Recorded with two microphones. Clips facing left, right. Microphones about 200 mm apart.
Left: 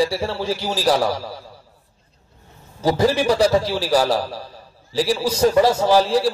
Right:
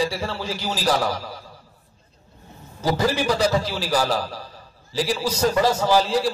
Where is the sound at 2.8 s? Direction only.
25° left (ahead or behind).